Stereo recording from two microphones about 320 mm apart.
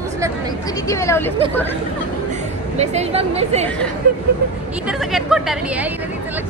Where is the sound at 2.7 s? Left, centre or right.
Centre.